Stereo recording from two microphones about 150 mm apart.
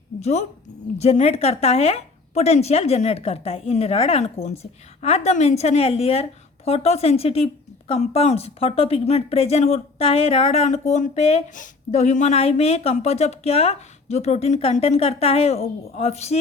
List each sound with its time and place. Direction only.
0.2 s speech: 50° left (ahead or behind)